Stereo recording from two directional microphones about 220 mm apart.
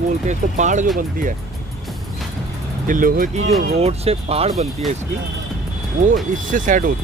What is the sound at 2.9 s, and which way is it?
Speech, 40° right (ahead or behind).